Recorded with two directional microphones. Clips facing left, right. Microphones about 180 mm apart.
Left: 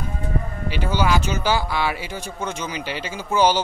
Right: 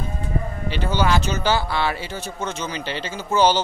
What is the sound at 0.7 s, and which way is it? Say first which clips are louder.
Speech: even; 10° left (ahead or behind).